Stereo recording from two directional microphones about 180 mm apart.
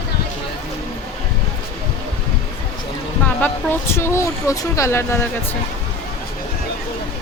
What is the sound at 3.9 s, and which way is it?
Speech, 15° left (ahead or behind).